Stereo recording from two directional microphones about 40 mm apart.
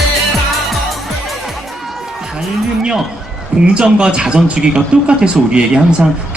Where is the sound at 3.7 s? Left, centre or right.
Right.